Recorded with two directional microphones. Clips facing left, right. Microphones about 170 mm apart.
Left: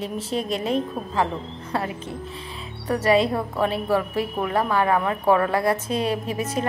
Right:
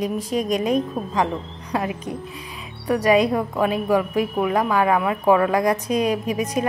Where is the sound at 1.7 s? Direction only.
15° right (ahead or behind).